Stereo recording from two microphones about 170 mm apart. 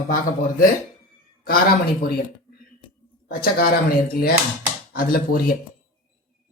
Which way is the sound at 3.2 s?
65° left (ahead or behind).